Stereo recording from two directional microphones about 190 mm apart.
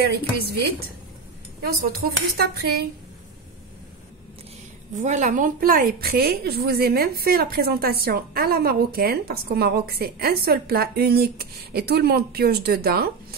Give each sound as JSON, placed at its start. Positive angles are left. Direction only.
{"t": 0.0, "sound": "a woman's voice", "side_deg": -55}
{"t": 2.5, "sound": "a woman's voice", "side_deg": -55}
{"t": 4.9, "sound": "a woman's voice", "side_deg": -40}